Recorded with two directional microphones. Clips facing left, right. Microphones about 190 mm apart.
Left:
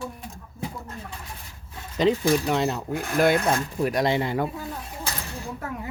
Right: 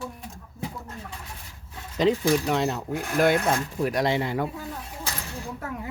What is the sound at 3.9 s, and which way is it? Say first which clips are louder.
Speech: left 1 dB; 15° left (ahead or behind).